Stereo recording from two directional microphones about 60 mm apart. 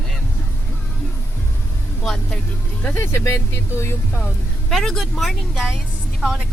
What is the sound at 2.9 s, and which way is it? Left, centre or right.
Speech, left.